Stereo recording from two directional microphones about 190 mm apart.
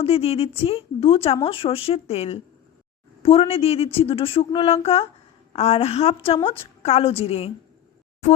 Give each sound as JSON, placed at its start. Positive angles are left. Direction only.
{"t": 0.0, "sound": "a woman's voice", "side_deg": 30}